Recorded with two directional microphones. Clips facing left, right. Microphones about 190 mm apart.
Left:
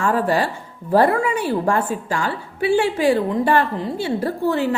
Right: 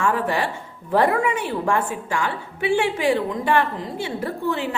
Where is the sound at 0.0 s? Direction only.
35° left (ahead or behind).